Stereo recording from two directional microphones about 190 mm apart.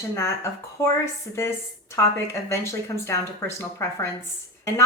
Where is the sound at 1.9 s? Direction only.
15° left (ahead or behind).